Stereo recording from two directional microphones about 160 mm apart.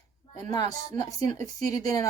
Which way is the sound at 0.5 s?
25° left (ahead or behind).